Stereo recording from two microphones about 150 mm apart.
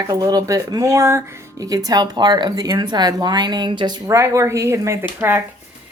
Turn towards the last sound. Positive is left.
turn(degrees=-15)  # may be behind; listen again after turning